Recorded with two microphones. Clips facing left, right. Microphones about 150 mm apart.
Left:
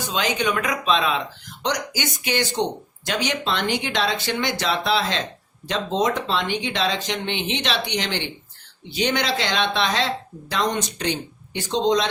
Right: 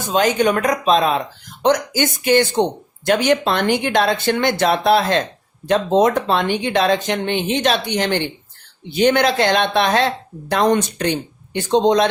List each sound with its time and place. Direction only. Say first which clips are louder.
0.0 s speech: right 7 dB; 45° right (ahead or behind)